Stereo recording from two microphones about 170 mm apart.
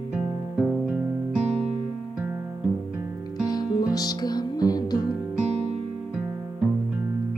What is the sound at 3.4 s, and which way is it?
Music, 25° left (ahead or behind).